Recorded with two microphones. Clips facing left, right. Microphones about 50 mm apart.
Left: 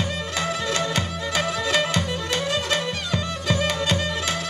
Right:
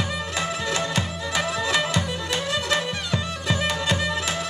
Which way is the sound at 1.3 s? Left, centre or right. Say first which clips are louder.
Left 1 dB; right.